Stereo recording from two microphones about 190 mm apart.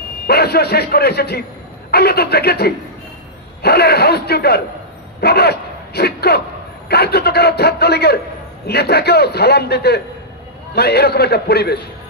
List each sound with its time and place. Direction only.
0.3 s a man's voice: 55° left (ahead or behind)